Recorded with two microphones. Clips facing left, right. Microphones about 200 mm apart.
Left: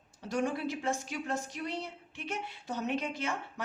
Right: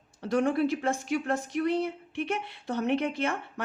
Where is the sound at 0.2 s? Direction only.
60° right (ahead or behind).